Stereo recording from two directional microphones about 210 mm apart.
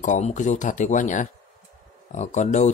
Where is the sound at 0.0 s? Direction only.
35° left (ahead or behind).